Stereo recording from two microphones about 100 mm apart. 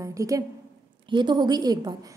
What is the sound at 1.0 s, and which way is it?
Speech, 50° right (ahead or behind).